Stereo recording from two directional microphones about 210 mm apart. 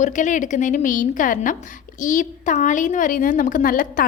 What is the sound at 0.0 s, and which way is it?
A woman's voice, 35° left (ahead or behind).